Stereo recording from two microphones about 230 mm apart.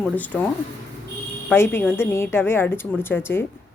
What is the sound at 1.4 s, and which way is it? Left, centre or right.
A woman's voice, centre.